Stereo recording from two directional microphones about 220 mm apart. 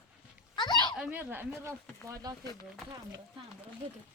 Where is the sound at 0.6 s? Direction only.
20° left (ahead or behind).